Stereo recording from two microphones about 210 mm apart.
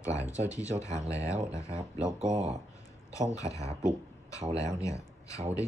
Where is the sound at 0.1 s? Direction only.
15° left (ahead or behind).